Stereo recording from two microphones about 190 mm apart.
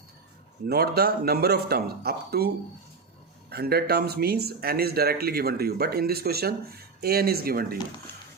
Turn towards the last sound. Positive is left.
turn(degrees=-50)  # may be behind; listen again after turning